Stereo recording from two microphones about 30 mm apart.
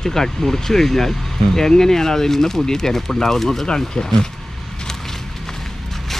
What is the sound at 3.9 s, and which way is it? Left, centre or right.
Speech, left.